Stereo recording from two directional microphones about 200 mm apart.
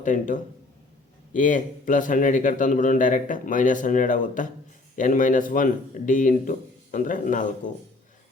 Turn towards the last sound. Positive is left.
turn(degrees=40)  # may be behind; listen again after turning